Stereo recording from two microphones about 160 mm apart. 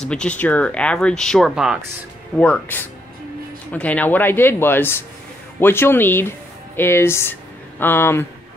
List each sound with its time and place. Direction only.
0.1 s speech: 5° left (ahead or behind)
2.3 s speech: 10° left (ahead or behind)